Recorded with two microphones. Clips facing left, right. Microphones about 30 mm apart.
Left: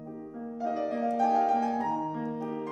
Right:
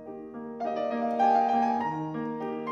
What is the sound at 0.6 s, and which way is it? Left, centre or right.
Music, right.